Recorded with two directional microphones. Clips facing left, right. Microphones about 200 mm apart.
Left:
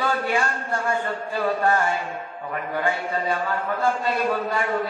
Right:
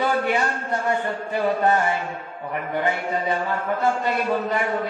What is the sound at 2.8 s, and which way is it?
Speech, 20° right (ahead or behind).